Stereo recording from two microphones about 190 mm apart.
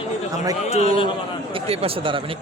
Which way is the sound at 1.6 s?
30° right (ahead or behind).